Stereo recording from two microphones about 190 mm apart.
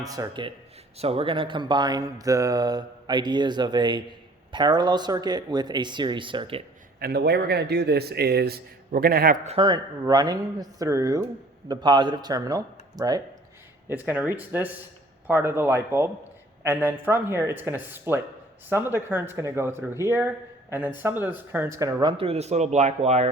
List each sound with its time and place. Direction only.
0.0 s speech: 20° right (ahead or behind)
7.0 s speech: 55° right (ahead or behind); by 13.2 s 20° right (ahead or behind)
13.8 s speech: 10° right (ahead or behind)
22.2 s speech: 35° right (ahead or behind)